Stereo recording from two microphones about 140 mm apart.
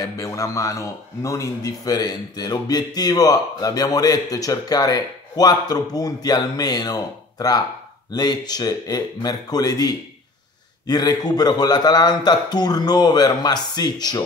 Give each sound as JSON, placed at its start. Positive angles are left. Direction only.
{"t": 0.0, "sound": "a man's voice", "side_deg": 20}